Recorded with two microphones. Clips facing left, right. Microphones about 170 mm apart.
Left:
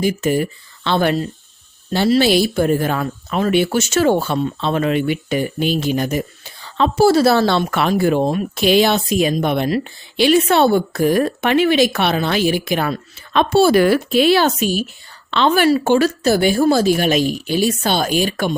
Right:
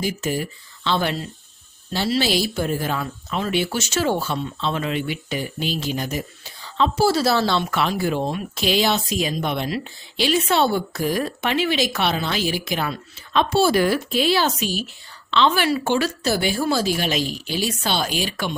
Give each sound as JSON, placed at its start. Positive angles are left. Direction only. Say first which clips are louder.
{"t": 0.0, "sound": "a woman's voice", "louder": "left 7 dB", "side_deg": 55}